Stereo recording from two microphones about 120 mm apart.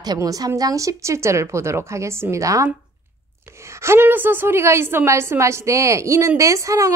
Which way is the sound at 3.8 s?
20° right (ahead or behind).